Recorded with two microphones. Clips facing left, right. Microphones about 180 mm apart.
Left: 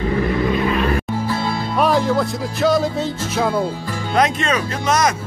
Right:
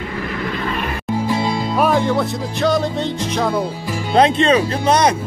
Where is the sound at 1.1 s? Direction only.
15° right (ahead or behind).